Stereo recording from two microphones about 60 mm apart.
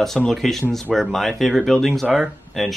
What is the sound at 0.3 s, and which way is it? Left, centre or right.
Speech, centre.